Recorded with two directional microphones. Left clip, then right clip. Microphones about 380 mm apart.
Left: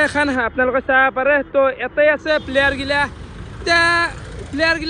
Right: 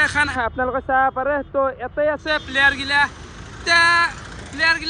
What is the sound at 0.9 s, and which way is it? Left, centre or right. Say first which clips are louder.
Speech: left 3 dB; centre.